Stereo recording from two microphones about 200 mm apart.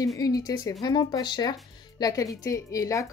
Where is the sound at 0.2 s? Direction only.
20° left (ahead or behind).